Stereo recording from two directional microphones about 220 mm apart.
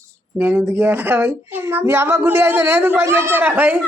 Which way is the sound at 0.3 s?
10° right (ahead or behind).